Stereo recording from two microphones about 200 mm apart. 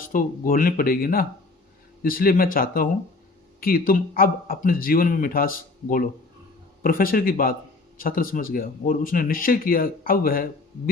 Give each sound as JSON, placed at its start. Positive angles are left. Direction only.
{"t": 0.1, "sound": "speech", "side_deg": 45}